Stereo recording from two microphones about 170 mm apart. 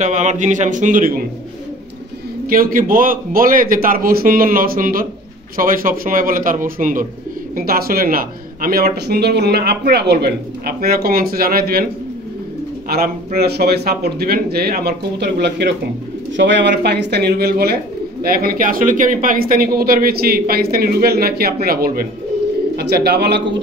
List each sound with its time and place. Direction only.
0.0 s a man's voice: 45° right (ahead or behind)
2.5 s a man's voice: 55° right (ahead or behind)
12.8 s a man's voice: 60° right (ahead or behind)
22.8 s speech: 70° right (ahead or behind)